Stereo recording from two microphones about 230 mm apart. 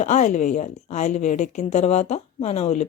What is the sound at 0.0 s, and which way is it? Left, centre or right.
Speech, left.